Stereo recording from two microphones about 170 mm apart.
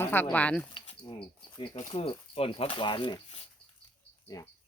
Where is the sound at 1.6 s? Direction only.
35° left (ahead or behind).